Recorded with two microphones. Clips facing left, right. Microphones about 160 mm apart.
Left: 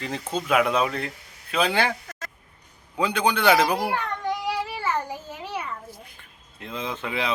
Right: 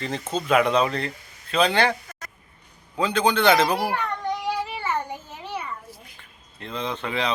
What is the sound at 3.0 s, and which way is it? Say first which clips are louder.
Speech: right 2 dB; 10° left (ahead or behind).